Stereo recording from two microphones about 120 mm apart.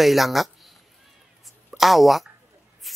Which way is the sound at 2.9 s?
Centre (ahead or behind).